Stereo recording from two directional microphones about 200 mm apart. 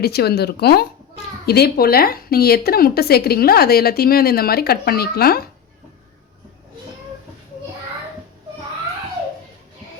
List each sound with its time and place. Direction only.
0.0 s speech: 55° left (ahead or behind)